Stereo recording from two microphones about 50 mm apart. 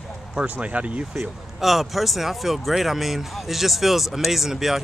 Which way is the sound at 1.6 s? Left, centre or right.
Centre.